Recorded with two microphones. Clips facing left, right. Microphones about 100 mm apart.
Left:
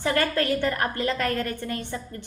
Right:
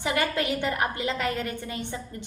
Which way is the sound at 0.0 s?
15° right (ahead or behind).